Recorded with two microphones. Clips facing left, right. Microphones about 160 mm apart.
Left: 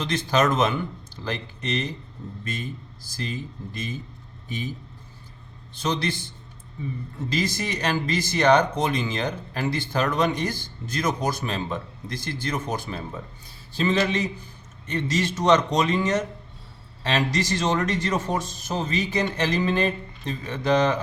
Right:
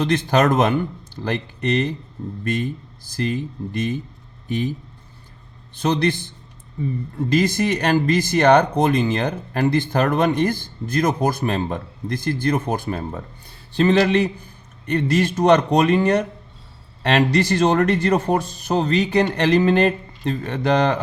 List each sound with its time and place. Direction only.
0.0 s speech: 60° right (ahead or behind)
5.7 s speech: 60° right (ahead or behind)
7.3 s speech: 55° right (ahead or behind)
13.7 s speech: 65° right (ahead or behind)